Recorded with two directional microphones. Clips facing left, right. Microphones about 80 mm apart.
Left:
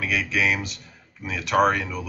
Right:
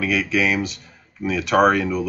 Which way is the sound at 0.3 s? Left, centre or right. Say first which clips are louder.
Right 4 dB; centre.